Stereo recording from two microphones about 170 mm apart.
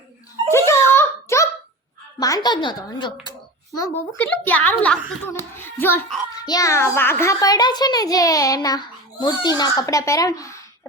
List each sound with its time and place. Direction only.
0.5 s a sound: 15° left (ahead or behind)
2.1 s a child's voice: 20° left (ahead or behind)
3.8 s a child's voice: 15° left (ahead or behind)